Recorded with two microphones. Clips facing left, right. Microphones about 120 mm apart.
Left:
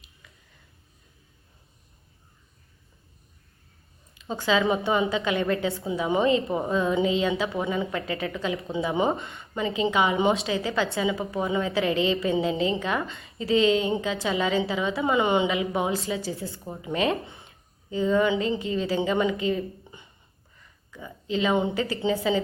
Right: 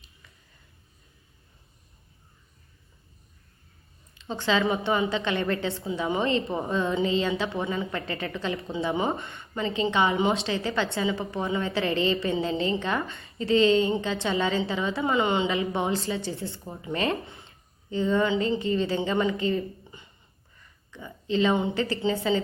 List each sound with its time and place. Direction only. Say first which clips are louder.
4.3 s a woman's voice: left 2 dB; 10° left (ahead or behind)
8.8 s speech: left 2 dB; 15° left (ahead or behind)
9.3 s a woman's voice: left 1 dB; 5° left (ahead or behind)
15.0 s a woman's voice: left 2 dB; 15° left (ahead or behind)
15.4 s a woman's voice: left 1 dB; 5° left (ahead or behind)
20.9 s a woman's voice: right 2 dB; 5° left (ahead or behind)